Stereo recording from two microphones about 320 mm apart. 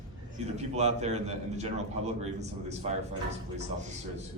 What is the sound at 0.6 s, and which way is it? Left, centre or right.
A man's voice, right.